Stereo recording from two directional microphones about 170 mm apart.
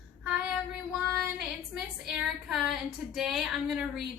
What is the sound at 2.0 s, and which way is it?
Speech, centre (ahead or behind).